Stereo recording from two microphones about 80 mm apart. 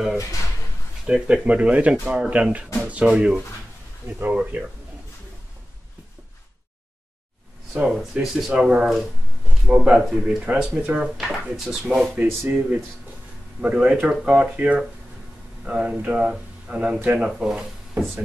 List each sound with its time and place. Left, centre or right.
0.2 s speech: left
1.0 s speech: centre
7.7 s speech: centre
10.4 s speech: centre
11.1 s speech: centre
12.4 s speech: centre
17.2 s speech: centre